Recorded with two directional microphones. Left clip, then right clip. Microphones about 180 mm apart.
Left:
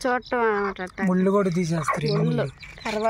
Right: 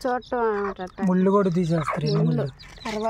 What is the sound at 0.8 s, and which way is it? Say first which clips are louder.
Speech: left 1 dB; 10° left (ahead or behind).